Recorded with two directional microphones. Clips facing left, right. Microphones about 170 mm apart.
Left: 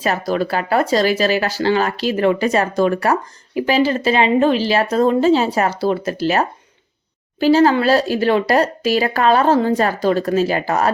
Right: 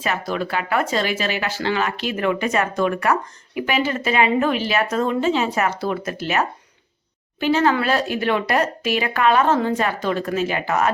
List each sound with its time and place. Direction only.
0.0 s speech: 40° left (ahead or behind)